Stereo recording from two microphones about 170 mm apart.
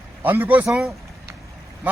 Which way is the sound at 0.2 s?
10° right (ahead or behind).